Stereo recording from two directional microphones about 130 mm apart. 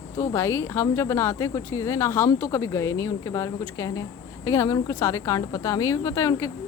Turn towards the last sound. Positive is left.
turn(degrees=25)  # may be behind; listen again after turning